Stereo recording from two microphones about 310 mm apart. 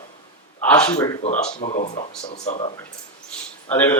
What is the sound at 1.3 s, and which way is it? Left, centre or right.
Speech, left.